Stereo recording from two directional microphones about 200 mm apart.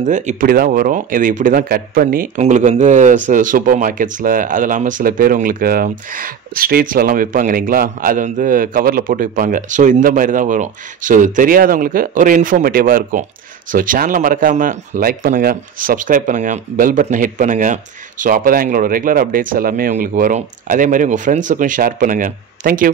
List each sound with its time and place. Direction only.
0.0 s speech: 40° right (ahead or behind)